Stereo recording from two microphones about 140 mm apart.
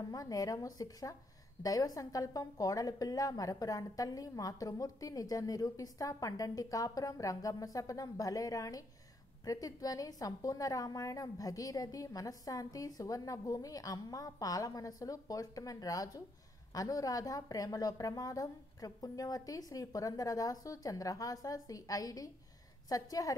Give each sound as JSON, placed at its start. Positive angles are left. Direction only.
{"t": 0.1, "sound": "a woman's voice", "side_deg": 25}